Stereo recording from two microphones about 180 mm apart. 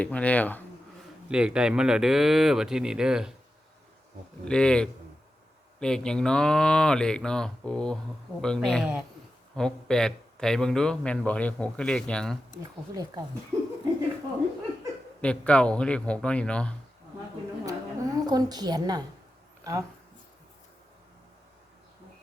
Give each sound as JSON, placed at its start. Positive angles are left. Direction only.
{"t": 0.0, "sound": "speech", "side_deg": 5}
{"t": 1.3, "sound": "a man's voice", "side_deg": -5}
{"t": 4.4, "sound": "a man's voice", "side_deg": 5}
{"t": 13.5, "sound": "a sound", "side_deg": -15}
{"t": 15.2, "sound": "speech", "side_deg": 5}
{"t": 17.7, "sound": "a woman's voice", "side_deg": -20}